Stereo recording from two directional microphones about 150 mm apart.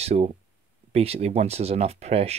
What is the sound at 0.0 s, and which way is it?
Speech, 45° right (ahead or behind).